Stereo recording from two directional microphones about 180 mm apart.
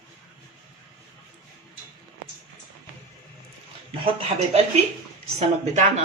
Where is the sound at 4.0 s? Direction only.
30° right (ahead or behind).